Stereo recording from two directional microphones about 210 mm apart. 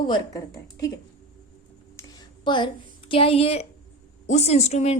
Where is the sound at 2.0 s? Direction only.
20° left (ahead or behind).